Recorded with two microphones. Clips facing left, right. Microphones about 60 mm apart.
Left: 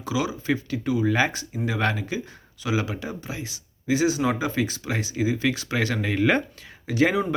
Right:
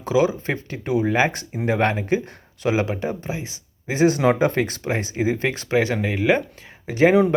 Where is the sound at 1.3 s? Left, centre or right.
Right.